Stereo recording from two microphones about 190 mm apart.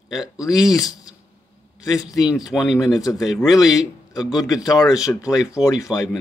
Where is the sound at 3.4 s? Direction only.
20° left (ahead or behind).